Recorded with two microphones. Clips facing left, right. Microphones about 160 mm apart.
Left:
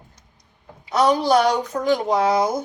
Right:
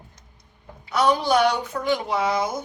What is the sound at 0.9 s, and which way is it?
Speech, 35° left (ahead or behind).